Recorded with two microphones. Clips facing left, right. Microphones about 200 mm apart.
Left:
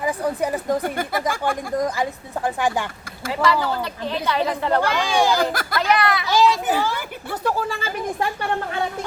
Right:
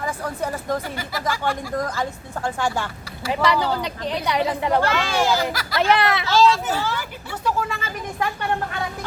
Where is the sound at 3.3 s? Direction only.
20° right (ahead or behind).